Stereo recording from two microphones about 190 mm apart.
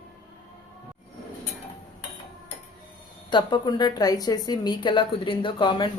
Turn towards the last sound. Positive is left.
turn(degrees=25)  # may be behind; listen again after turning